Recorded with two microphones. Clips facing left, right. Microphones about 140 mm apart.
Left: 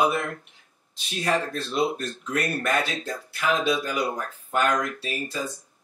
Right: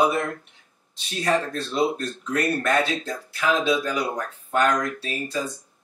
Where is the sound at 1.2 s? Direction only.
Centre (ahead or behind).